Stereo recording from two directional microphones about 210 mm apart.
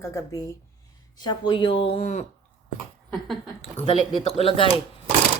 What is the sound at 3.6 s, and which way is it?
Speech, 25° left (ahead or behind).